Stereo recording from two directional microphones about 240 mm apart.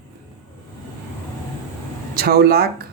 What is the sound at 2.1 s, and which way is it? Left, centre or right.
Speech, right.